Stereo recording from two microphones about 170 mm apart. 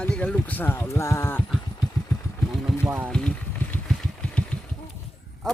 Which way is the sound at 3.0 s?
5° left (ahead or behind).